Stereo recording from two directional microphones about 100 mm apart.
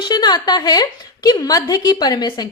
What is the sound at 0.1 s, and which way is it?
A woman's voice, 45° left (ahead or behind).